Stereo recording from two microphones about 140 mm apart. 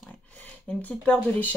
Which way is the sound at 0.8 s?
10° left (ahead or behind).